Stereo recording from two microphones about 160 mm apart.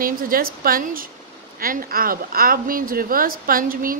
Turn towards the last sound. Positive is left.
turn(degrees=-60)  # may be behind; listen again after turning